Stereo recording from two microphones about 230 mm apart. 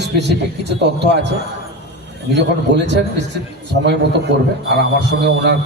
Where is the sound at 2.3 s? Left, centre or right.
Right.